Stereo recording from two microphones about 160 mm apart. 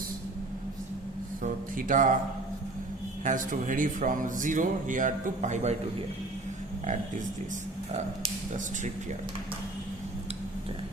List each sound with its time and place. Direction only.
1.4 s speech: 55° right (ahead or behind)
3.2 s speech: 55° right (ahead or behind)